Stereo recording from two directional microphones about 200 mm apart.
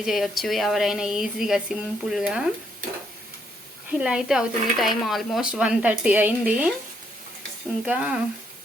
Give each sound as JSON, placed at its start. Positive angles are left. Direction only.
{"t": 0.0, "sound": "speech", "side_deg": 0}
{"t": 3.9, "sound": "speech", "side_deg": -5}
{"t": 7.9, "sound": "speech", "side_deg": -5}